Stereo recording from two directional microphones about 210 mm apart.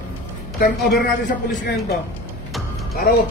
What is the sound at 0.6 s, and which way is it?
Speech, 45° left (ahead or behind).